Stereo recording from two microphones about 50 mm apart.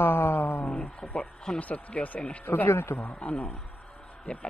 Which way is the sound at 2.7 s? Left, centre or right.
Left.